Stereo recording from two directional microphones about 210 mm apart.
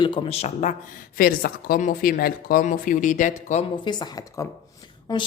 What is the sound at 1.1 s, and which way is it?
Speech, 45° left (ahead or behind).